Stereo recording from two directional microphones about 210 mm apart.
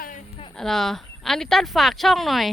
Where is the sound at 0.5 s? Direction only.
Centre (ahead or behind).